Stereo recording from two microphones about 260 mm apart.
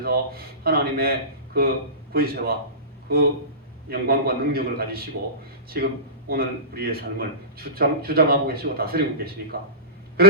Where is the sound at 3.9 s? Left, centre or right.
Right.